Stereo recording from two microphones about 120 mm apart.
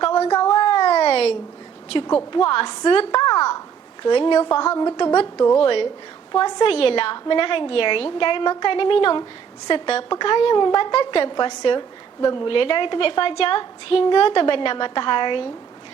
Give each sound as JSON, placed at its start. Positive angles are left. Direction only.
{"t": 0.0, "sound": "a sound", "side_deg": 50}
{"t": 2.3, "sound": "a woman's voice", "side_deg": 45}
{"t": 5.5, "sound": "a woman's voice", "side_deg": 50}
{"t": 6.3, "sound": "a woman's voice", "side_deg": 35}